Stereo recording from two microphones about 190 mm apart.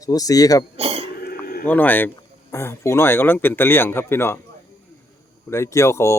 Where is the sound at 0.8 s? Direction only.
30° right (ahead or behind).